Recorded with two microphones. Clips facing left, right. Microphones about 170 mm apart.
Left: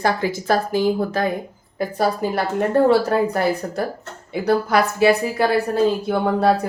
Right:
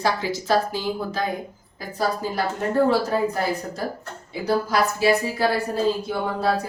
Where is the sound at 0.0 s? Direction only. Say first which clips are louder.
Left 3 dB; 50° left (ahead or behind); by 3.3 s 70° left (ahead or behind).